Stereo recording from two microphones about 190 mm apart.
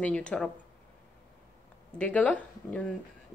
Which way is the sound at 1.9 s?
5° left (ahead or behind).